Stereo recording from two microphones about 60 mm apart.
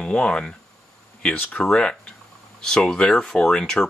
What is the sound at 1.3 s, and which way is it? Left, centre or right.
Speech, left.